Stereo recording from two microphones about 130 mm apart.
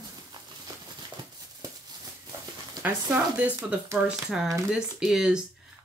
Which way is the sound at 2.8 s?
15° right (ahead or behind).